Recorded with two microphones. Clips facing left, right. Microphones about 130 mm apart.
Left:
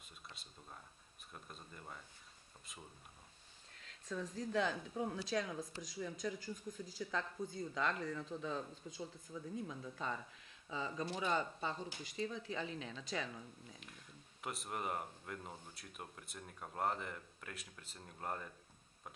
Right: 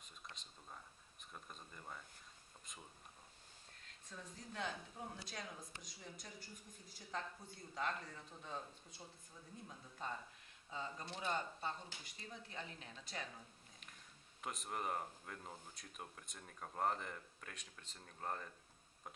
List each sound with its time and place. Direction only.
0.3 s speech: 5° left (ahead or behind)
3.7 s speech: 90° left
14.4 s speech: 5° left (ahead or behind)